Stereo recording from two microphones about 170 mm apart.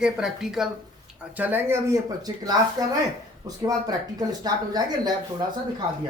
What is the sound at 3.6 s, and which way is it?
Speech, 20° right (ahead or behind).